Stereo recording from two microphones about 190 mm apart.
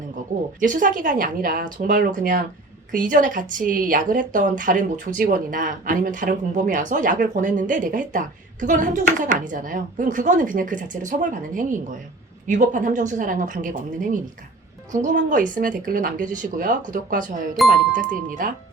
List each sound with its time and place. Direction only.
0.6 s a woman's voice: 45° right (ahead or behind)